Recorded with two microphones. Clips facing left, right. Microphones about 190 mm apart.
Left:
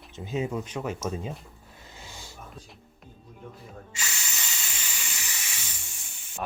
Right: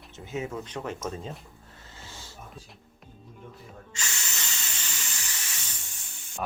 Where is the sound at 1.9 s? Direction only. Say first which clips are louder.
Left 1 dB; 15° left (ahead or behind).